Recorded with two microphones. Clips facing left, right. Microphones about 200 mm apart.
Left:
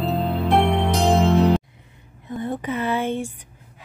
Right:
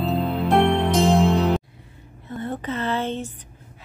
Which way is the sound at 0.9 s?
Centre (ahead or behind).